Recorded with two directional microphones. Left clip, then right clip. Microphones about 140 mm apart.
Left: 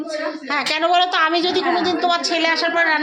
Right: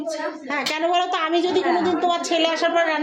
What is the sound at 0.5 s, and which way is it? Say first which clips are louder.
A woman's voice: left 4 dB; 10° right (ahead or behind).